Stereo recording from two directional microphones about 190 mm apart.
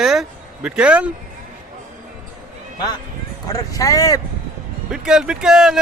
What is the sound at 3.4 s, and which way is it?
Speech, 20° left (ahead or behind).